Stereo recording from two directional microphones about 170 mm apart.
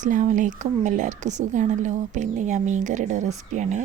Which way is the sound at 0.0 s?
50° right (ahead or behind).